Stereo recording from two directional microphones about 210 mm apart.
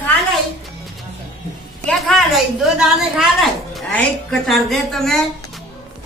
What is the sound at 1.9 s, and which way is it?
A woman's voice, centre (ahead or behind).